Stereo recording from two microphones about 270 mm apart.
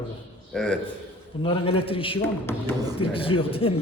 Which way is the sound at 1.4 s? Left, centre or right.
Centre.